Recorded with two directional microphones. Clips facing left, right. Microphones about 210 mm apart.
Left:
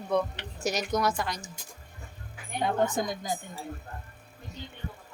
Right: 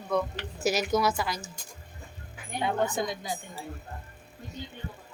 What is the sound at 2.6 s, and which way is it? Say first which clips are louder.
Speech: left 1 dB; 45° left (ahead or behind).